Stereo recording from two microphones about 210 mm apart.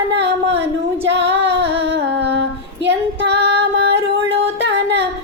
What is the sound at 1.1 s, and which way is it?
Child singing, 55° right (ahead or behind).